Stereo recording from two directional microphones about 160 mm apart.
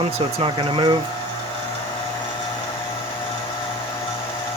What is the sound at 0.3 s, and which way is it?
Speech, 35° right (ahead or behind).